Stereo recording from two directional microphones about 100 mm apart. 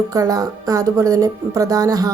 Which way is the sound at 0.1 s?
35° right (ahead or behind).